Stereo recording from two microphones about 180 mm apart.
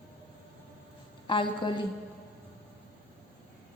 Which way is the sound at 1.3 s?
25° left (ahead or behind).